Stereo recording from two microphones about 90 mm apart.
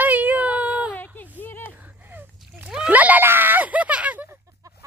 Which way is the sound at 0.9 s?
20° left (ahead or behind).